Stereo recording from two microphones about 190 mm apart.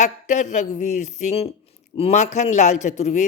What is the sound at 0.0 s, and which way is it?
A man's voice, 40° left (ahead or behind).